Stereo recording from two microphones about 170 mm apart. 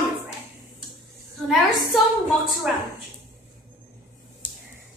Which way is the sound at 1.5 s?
Centre (ahead or behind).